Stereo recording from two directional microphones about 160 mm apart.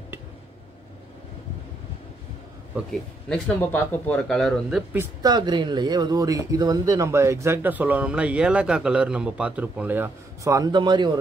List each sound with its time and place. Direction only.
2.7 s speech: centre (ahead or behind)
4.9 s speech: 25° right (ahead or behind)